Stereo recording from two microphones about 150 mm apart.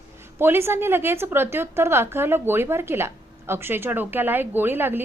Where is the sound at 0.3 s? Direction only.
15° right (ahead or behind).